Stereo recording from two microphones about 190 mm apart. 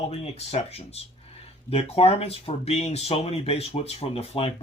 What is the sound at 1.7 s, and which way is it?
Speech, 30° left (ahead or behind).